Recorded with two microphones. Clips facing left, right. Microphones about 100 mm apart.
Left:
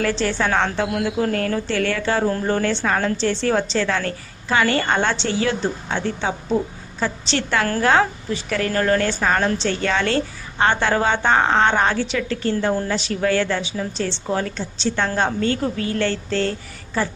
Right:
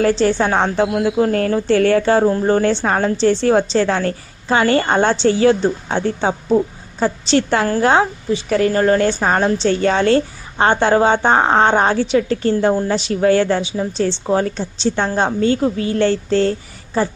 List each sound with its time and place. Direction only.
0.0 s a woman's voice: 30° right (ahead or behind)